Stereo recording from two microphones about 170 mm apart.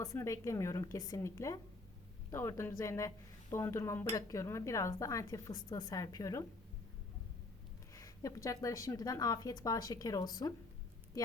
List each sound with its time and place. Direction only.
0.0 s a woman's voice: 20° left (ahead or behind)
7.9 s speech: 20° left (ahead or behind)